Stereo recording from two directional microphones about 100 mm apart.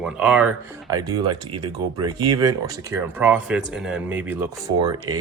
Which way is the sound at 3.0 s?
15° right (ahead or behind).